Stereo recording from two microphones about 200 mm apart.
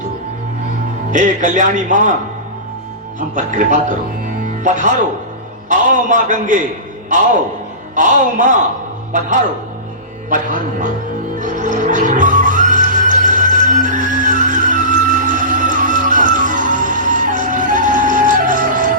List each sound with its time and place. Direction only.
1.1 s a man's voice: 40° right (ahead or behind)
3.2 s a man's voice: 40° right (ahead or behind)
7.9 s a man's voice: 40° right (ahead or behind)
10.2 s a man's voice: 40° right (ahead or behind)
11.3 s music: 40° right (ahead or behind)